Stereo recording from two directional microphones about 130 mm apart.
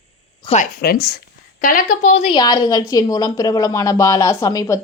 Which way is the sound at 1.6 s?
90° left.